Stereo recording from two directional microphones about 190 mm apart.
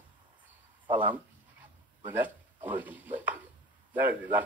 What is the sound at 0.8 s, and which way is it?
Speech, 10° right (ahead or behind).